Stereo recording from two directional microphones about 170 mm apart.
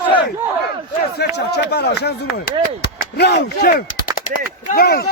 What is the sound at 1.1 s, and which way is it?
Speech, 75° left (ahead or behind).